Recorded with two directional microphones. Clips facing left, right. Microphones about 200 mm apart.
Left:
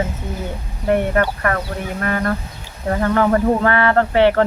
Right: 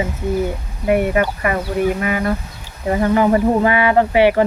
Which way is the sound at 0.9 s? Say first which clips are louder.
Right 1 dB; 10° right (ahead or behind).